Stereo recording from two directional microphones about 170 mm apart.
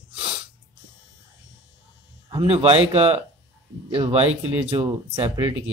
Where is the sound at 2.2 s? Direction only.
30° right (ahead or behind).